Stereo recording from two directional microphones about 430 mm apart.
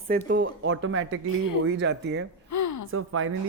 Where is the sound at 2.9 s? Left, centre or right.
Right.